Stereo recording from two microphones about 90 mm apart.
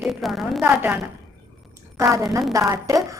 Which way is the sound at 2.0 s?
35° right (ahead or behind).